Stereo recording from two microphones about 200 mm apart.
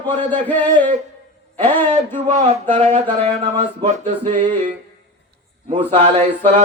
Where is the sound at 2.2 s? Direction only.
35° right (ahead or behind).